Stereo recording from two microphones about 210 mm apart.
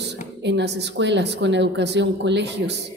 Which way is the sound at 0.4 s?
55° right (ahead or behind).